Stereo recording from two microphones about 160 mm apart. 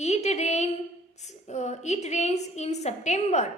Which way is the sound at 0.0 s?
45° left (ahead or behind).